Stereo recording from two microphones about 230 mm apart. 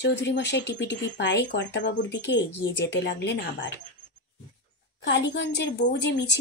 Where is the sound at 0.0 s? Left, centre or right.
Left.